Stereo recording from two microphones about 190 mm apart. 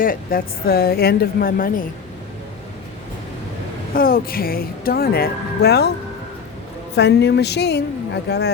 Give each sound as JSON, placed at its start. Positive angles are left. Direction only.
{"t": 0.0, "sound": "a woman's voice", "side_deg": 50}
{"t": 3.9, "sound": "a woman's voice", "side_deg": 50}
{"t": 6.9, "sound": "a woman's voice", "side_deg": 60}